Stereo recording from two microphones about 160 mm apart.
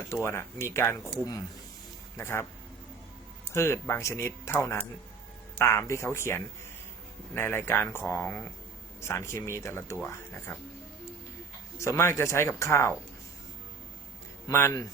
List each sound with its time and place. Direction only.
0.1 s speech: 15° left (ahead or behind)
2.1 s speech: 15° left (ahead or behind)
3.5 s speech: 15° left (ahead or behind)
11.8 s speech: 15° left (ahead or behind)
14.4 s speech: 15° left (ahead or behind)